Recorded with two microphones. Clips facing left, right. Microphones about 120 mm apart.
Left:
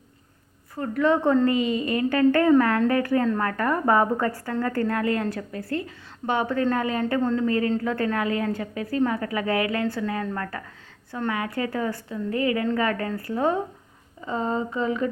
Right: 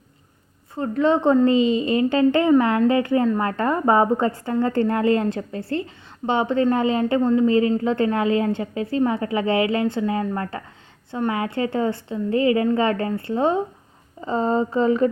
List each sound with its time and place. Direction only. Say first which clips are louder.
0.8 s a woman's voice: right 3 dB; 25° right (ahead or behind)
14.2 s speech: right 5 dB; 35° right (ahead or behind)